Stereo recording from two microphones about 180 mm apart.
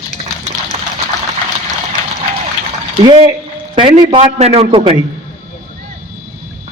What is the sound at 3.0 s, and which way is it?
A man's voice, 25° right (ahead or behind).